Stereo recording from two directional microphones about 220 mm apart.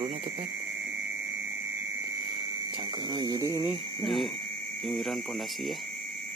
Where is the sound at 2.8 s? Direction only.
20° right (ahead or behind).